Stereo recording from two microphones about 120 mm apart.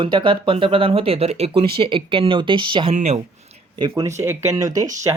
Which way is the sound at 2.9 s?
65° right (ahead or behind).